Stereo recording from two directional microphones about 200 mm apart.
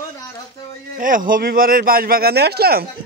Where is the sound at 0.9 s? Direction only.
45° right (ahead or behind).